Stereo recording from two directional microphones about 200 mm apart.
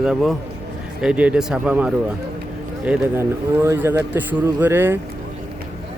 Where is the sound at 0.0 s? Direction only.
Centre (ahead or behind).